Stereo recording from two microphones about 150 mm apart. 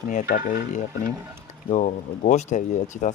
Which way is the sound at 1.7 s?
55° left (ahead or behind).